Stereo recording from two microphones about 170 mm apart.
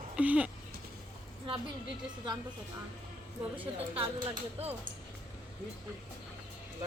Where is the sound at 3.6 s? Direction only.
30° right (ahead or behind).